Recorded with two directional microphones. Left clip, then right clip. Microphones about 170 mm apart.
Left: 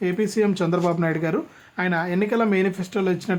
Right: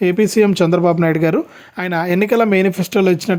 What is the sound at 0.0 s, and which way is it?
Speech, 45° right (ahead or behind).